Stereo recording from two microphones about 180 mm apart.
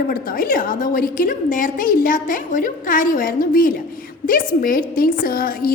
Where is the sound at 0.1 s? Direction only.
50° left (ahead or behind).